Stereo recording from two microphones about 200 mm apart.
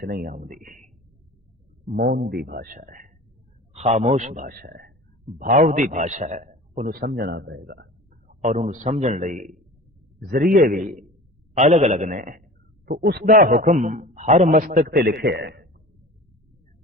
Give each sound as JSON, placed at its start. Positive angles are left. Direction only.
{"t": 0.0, "sound": "a man's voice", "side_deg": -50}
{"t": 3.7, "sound": "a man's voice", "side_deg": -30}
{"t": 5.4, "sound": "a man's voice", "side_deg": -40}
{"t": 8.3, "sound": "a man's voice", "side_deg": -40}